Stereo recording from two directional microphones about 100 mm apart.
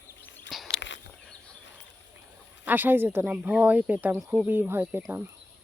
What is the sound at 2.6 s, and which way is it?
Speech, 20° right (ahead or behind).